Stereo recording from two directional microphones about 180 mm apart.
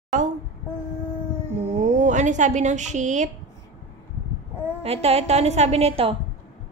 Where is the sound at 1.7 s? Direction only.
45° right (ahead or behind).